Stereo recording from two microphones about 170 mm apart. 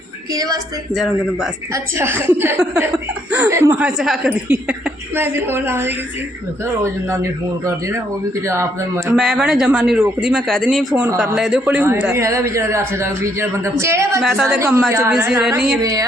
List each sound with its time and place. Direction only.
0.3 s a woman's voice: 20° right (ahead or behind)
0.9 s speech: centre (ahead or behind)
1.7 s a woman's voice: 15° right (ahead or behind)
5.1 s a woman's voice: 15° right (ahead or behind)
7.1 s a woman's voice: 15° right (ahead or behind)
9.0 s speech: centre (ahead or behind)
10.9 s a woman's voice: 10° right (ahead or behind)
14.2 s speech: centre (ahead or behind)
14.6 s a woman's voice: 15° right (ahead or behind)
15.3 s speech: 5° right (ahead or behind)
15.8 s a woman's voice: 20° right (ahead or behind)